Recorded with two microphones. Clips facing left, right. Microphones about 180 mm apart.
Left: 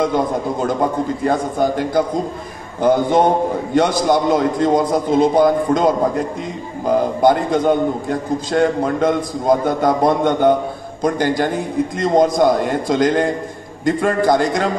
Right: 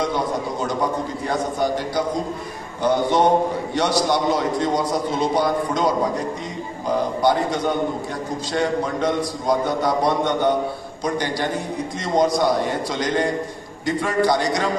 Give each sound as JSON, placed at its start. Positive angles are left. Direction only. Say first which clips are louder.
{"t": 0.0, "sound": "a man's voice", "louder": "left 5 dB", "side_deg": 50}